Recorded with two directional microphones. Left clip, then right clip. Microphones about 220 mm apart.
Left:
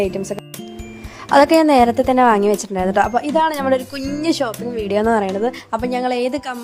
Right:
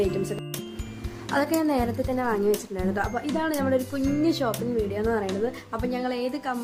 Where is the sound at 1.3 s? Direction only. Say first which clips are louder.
Left 13 dB; 40° left (ahead or behind).